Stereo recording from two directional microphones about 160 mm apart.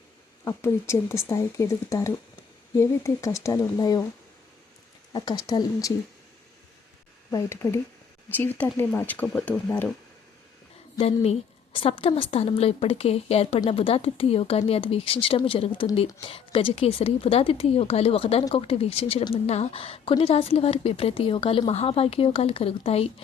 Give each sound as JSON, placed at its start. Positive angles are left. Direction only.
{"t": 0.4, "sound": "speech", "side_deg": 15}
{"t": 5.1, "sound": "speech", "side_deg": 25}
{"t": 7.3, "sound": "speech", "side_deg": 15}
{"t": 10.9, "sound": "a woman's voice", "side_deg": 40}